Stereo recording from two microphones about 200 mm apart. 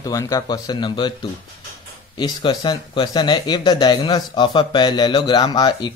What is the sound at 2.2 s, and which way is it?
Speech, 25° left (ahead or behind).